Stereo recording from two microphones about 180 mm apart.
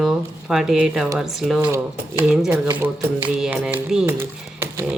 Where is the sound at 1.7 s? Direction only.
15° right (ahead or behind).